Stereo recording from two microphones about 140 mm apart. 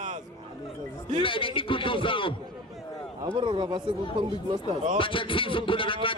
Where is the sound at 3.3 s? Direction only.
35° right (ahead or behind).